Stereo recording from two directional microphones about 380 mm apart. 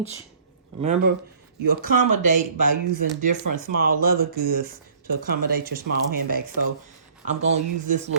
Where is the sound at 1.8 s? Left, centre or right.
Right.